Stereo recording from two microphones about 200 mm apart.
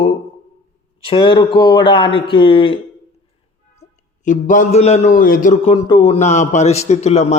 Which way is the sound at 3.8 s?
40° left (ahead or behind).